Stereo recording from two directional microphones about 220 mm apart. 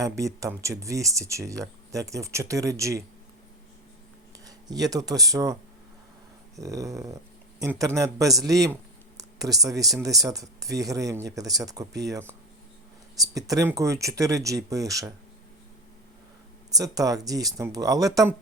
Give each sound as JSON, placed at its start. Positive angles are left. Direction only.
{"t": 0.0, "sound": "a man's voice", "side_deg": -15}
{"t": 4.4, "sound": "speech", "side_deg": -15}
{"t": 6.6, "sound": "a man's voice", "side_deg": -15}
{"t": 16.7, "sound": "a man's voice", "side_deg": -15}